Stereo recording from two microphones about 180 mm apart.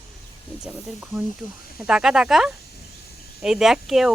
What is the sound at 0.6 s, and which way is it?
Speech, 5° right (ahead or behind).